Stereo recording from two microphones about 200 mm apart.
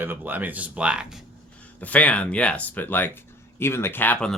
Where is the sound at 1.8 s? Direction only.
5° left (ahead or behind).